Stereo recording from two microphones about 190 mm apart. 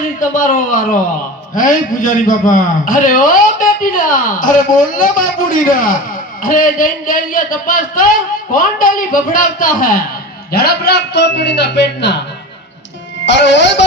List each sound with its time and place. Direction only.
0.2 s a man's voice: 45° left (ahead or behind); by 12.2 s 65° left (ahead or behind)
13.2 s music: 70° left (ahead or behind)